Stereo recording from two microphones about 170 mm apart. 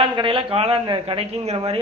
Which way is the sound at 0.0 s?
30° right (ahead or behind).